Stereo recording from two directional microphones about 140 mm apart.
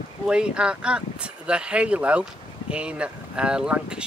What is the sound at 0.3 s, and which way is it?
Speech, 5° right (ahead or behind).